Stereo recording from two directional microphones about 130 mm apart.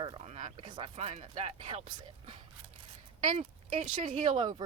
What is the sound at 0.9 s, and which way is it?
Speech, 55° right (ahead or behind).